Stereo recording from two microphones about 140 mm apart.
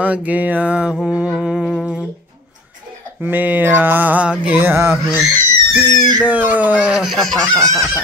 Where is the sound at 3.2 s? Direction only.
10° right (ahead or behind).